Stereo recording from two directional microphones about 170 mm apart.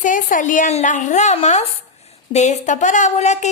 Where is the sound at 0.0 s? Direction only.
50° left (ahead or behind).